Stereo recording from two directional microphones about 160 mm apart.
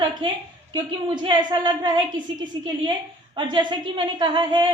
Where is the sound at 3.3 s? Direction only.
30° right (ahead or behind).